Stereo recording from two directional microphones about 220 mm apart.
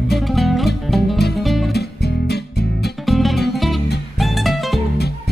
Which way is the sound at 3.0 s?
Centre (ahead or behind).